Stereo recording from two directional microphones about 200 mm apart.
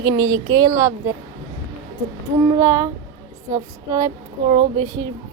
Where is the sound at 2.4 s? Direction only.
15° right (ahead or behind).